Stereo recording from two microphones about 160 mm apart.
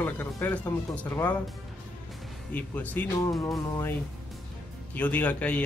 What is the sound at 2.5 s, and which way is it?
Speech, 10° left (ahead or behind).